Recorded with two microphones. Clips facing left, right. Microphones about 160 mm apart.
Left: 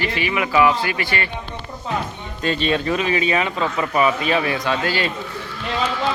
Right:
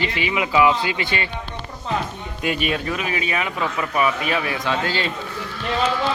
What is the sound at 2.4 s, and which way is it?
Speech, 10° right (ahead or behind).